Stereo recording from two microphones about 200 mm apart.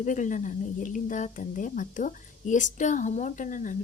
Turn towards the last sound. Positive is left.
turn(degrees=40)  # may be behind; listen again after turning